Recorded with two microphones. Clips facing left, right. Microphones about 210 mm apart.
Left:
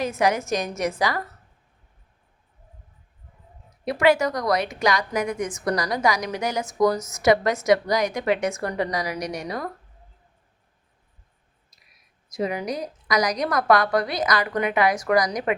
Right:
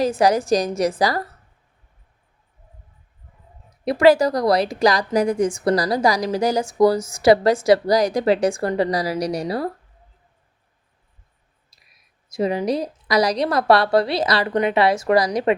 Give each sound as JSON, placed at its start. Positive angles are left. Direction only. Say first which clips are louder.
{"t": 0.0, "sound": "a woman's voice", "louder": "right 5 dB", "side_deg": -35}
{"t": 3.8, "sound": "a woman's voice", "louder": "right 5 dB", "side_deg": -35}
{"t": 12.3, "sound": "a woman's voice", "louder": "right 6 dB", "side_deg": -30}